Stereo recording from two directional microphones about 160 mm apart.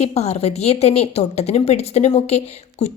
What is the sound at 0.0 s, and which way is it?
A woman's voice, 40° left (ahead or behind).